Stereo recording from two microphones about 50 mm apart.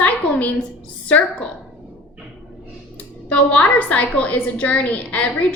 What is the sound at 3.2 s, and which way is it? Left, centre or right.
A woman's voice, left.